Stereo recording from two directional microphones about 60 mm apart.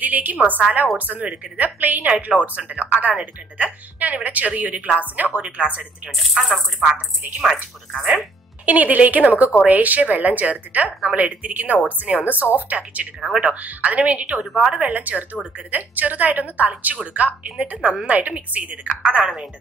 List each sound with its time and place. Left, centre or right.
0.0 s a woman's voice: right
6.1 s speech: centre
7.9 s speech: centre
8.6 s a woman's voice: right
13.2 s speech: centre
13.5 s a woman's voice: right
14.4 s speech: centre
14.7 s a woman's voice: right